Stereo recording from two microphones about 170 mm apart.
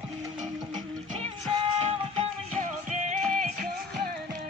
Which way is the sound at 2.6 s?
50° right (ahead or behind).